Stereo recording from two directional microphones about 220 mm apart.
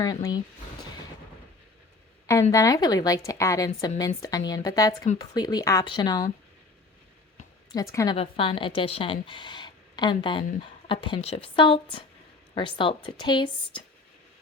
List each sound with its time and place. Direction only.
0.0 s a woman's voice: 15° left (ahead or behind)
2.2 s a woman's voice: 15° left (ahead or behind)
7.7 s speech: 15° left (ahead or behind)